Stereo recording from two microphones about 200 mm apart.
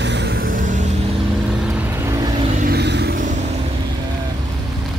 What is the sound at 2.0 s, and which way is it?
Vehicle, 15° right (ahead or behind).